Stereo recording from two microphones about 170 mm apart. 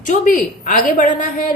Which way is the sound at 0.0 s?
50° left (ahead or behind).